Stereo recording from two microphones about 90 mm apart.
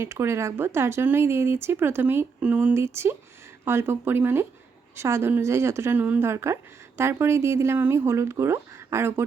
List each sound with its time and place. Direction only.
0.0 s speech: 30° right (ahead or behind)
2.7 s speech: 30° right (ahead or behind)
6.0 s speech: 20° right (ahead or behind)
6.2 s speech: 30° right (ahead or behind)